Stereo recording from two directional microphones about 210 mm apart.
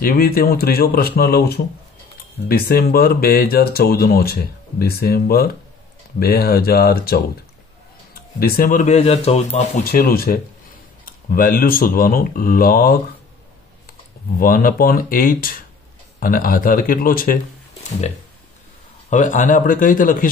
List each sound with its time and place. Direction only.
0.0 s speech: 45° left (ahead or behind); by 9.7 s 30° left (ahead or behind)
9.8 s speech: 45° left (ahead or behind)
14.4 s speech: 40° left (ahead or behind)
19.0 s speech: 35° left (ahead or behind)